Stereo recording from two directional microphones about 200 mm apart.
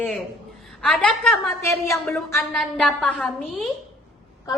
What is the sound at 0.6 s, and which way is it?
A woman's voice, centre (ahead or behind).